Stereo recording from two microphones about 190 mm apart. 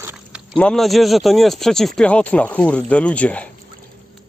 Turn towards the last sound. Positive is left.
turn(degrees=5)  # may be behind; listen again after turning